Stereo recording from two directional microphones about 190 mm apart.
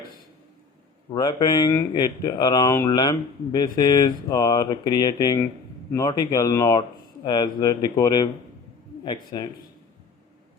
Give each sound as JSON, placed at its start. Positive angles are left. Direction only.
{"t": 1.1, "sound": "speech", "side_deg": 20}